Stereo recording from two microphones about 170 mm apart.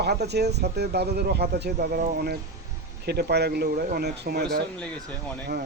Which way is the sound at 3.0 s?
70° right (ahead or behind).